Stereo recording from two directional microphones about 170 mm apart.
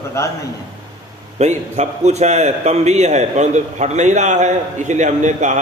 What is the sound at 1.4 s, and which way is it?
A man's voice, 40° right (ahead or behind).